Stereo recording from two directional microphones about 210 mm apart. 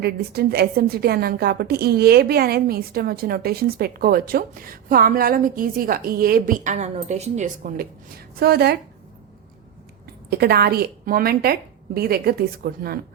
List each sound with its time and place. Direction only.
0.0 s a woman's voice: 50° right (ahead or behind)
8.4 s a woman's voice: 50° right (ahead or behind)
10.2 s a woman's voice: 50° right (ahead or behind)